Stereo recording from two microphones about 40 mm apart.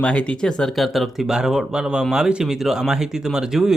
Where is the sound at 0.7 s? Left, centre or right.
Centre.